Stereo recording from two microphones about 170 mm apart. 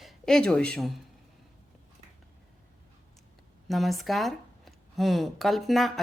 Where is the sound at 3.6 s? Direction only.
Centre (ahead or behind).